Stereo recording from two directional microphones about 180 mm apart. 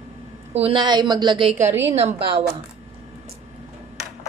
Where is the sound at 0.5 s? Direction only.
35° right (ahead or behind).